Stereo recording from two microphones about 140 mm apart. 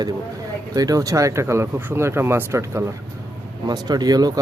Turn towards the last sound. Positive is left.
turn(degrees=-30)  # may be behind; listen again after turning